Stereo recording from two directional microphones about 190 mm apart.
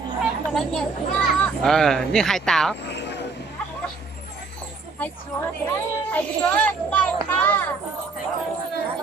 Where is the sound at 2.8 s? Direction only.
65° left (ahead or behind).